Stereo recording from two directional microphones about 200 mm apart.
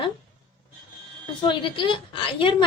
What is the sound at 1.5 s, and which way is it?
A woman's voice, 25° left (ahead or behind).